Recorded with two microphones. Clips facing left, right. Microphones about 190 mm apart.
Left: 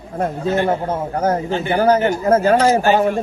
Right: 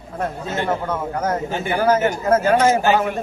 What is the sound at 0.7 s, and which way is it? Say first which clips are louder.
A man's voice: left 3 dB; 30° left (ahead or behind).